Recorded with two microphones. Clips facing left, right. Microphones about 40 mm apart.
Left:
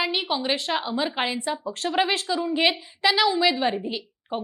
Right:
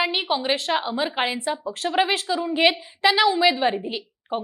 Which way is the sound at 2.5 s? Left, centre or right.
Right.